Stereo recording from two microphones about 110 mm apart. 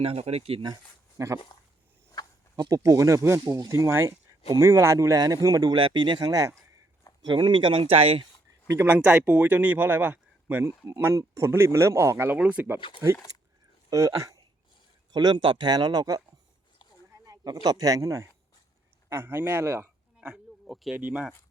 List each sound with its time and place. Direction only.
0.0 s speech: 65° right (ahead or behind)
1.2 s speech: 30° right (ahead or behind)
2.2 s a sound: 35° left (ahead or behind)
2.6 s speech: 35° right (ahead or behind)
5.7 s speech: 45° right (ahead or behind); by 6.6 s 30° right (ahead or behind)
7.3 s speech: 45° right (ahead or behind)
8.6 s speech: 20° right (ahead or behind)
9.0 s speech: 10° right (ahead or behind)
13.9 s speech: 30° right (ahead or behind)
15.1 s speech: 40° right (ahead or behind)
17.2 s speech: 35° right (ahead or behind)
20.2 s a sound: 5° right (ahead or behind)
20.9 s speech: 10° right (ahead or behind)